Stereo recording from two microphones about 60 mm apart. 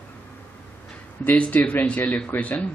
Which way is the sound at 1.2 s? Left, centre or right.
Left.